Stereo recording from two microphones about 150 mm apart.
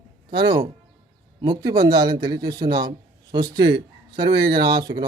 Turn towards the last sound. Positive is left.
turn(degrees=-30)  # may be behind; listen again after turning